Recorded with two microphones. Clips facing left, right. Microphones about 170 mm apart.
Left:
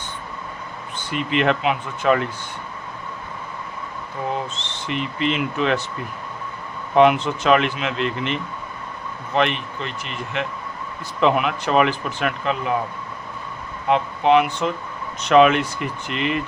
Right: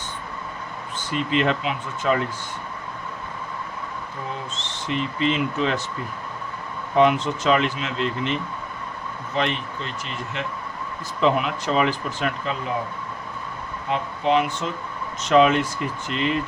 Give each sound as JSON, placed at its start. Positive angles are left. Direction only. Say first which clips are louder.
{"t": 0.9, "sound": "speech", "louder": "left 1 dB", "side_deg": 65}
{"t": 4.5, "sound": "speech", "louder": "even", "side_deg": 65}
{"t": 6.9, "sound": "speech", "louder": "left 3 dB", "side_deg": 65}
{"t": 13.8, "sound": "speech", "louder": "left 5 dB", "side_deg": 70}